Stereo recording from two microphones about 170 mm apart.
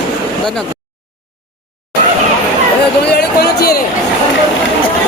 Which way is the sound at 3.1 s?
65° left (ahead or behind).